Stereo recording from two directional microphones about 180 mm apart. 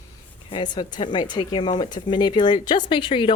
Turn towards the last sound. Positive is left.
turn(degrees=30)  # may be behind; listen again after turning